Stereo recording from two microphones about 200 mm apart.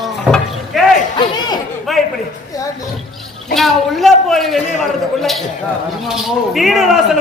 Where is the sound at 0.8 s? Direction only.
Centre (ahead or behind).